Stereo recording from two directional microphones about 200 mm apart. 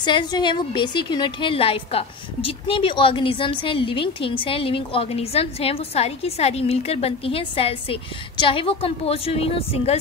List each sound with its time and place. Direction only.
0.0 s a woman's voice: 20° left (ahead or behind)